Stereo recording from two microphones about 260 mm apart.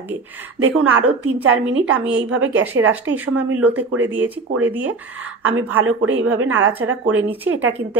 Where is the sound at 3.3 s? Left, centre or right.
Right.